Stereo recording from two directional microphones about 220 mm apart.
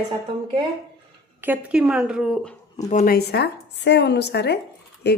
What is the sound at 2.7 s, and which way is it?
Speech, 35° left (ahead or behind).